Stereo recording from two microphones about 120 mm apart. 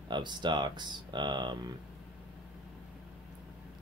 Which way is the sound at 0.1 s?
40° right (ahead or behind).